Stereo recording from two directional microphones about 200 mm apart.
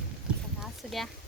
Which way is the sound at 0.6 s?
Centre (ahead or behind).